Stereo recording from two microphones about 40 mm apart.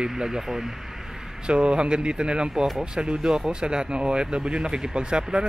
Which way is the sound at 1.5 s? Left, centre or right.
Right.